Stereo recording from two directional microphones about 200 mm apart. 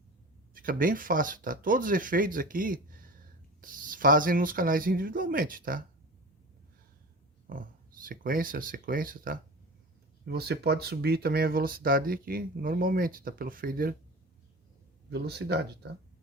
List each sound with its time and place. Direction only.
0.5 s speech: 45° right (ahead or behind)
7.5 s speech: 45° right (ahead or behind)
10.2 s speech: 55° right (ahead or behind)
15.1 s speech: 55° right (ahead or behind)